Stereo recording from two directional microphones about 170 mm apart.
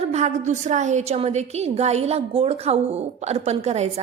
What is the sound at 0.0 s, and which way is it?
A woman's voice, 40° right (ahead or behind).